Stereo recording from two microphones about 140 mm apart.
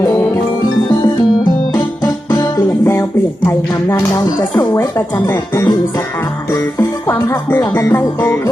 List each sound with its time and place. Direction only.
0.0 s music: 25° left (ahead or behind)
2.0 s music: 25° left (ahead or behind)